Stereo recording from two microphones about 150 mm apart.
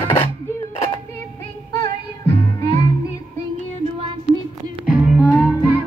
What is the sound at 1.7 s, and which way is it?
Music, 20° left (ahead or behind).